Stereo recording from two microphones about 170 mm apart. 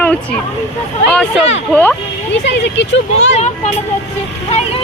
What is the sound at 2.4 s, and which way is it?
Speech, 90° left.